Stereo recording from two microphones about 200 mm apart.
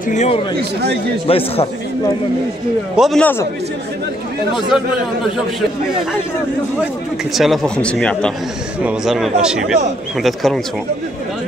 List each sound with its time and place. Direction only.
0.1 s a man's voice: 35° left (ahead or behind)
3.0 s speech: 5° left (ahead or behind)
7.3 s speech: centre (ahead or behind)